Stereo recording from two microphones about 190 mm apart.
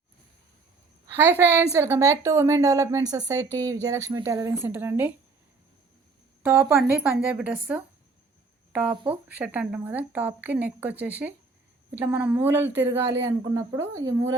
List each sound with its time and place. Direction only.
1.1 s a woman's voice: 10° right (ahead or behind)
6.4 s a woman's voice: 10° right (ahead or behind)